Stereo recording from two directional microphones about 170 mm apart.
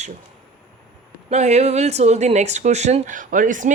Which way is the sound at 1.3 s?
40° right (ahead or behind).